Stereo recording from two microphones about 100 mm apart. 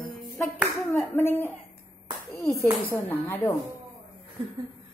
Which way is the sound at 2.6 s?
25° left (ahead or behind).